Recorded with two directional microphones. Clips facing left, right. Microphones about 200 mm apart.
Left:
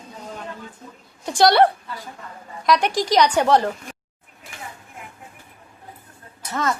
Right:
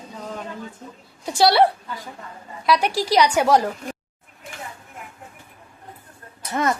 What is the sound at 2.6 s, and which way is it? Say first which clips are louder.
A woman's voice: left 1 dB; 5° right (ahead or behind).